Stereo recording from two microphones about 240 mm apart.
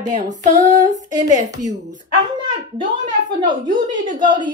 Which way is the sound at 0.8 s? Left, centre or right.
Centre.